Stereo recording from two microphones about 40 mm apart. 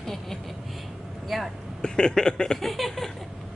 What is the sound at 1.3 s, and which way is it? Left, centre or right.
Speech, centre.